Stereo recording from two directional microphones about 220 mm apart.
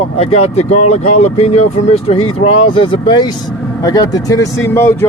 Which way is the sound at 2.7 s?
25° left (ahead or behind).